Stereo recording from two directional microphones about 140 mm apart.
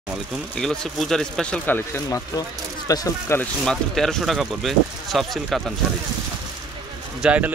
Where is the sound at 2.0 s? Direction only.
25° left (ahead or behind).